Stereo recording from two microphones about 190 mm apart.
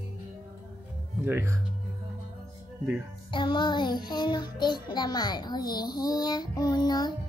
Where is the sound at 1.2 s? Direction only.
10° right (ahead or behind).